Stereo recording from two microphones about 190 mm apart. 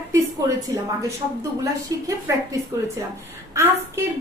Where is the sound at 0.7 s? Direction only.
20° right (ahead or behind).